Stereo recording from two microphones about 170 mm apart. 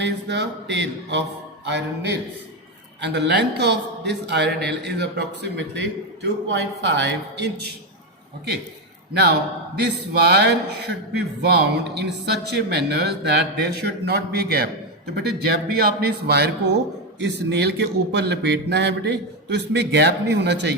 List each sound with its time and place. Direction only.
0.0 s a man's voice: 90° right
9.7 s speech: 70° right (ahead or behind); by 20.7 s 90° right